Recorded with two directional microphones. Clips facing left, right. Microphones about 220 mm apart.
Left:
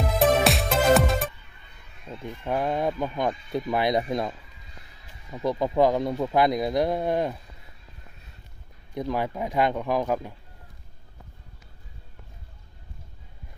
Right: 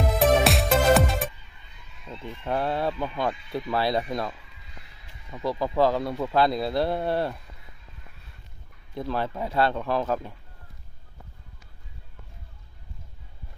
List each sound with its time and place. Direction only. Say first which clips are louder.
0.2 s music: even; centre (ahead or behind)
2.0 s speech: left 1 dB; 10° left (ahead or behind)
9.0 s speech: left 1 dB; 15° left (ahead or behind)